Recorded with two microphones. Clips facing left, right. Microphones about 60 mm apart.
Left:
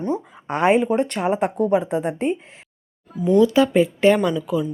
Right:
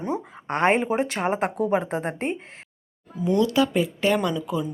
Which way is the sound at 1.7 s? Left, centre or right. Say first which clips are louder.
Left 4 dB; right.